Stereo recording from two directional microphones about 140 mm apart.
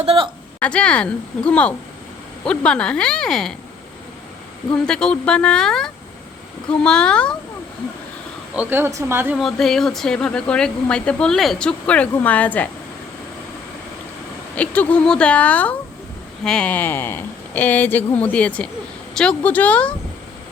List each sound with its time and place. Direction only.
0.0 s a woman's voice: 45° right (ahead or behind)
0.6 s speech: 10° left (ahead or behind)
4.9 s speech: 5° left (ahead or behind)
8.5 s speech: 15° right (ahead or behind)
9.4 s speech: centre (ahead or behind)
14.5 s speech: 10° left (ahead or behind)